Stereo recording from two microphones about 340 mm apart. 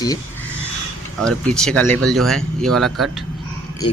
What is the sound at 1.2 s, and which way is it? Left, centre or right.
Speech, centre.